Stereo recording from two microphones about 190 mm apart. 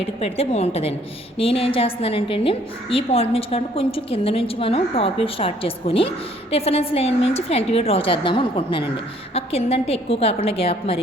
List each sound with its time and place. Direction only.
0.0 s a woman's voice: 30° left (ahead or behind)